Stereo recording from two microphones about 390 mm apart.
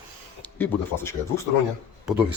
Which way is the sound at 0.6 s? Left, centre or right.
Centre.